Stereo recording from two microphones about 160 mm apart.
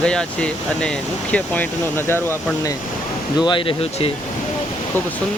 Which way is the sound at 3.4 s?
30° left (ahead or behind).